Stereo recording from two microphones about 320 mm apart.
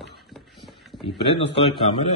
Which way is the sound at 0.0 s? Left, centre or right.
Centre.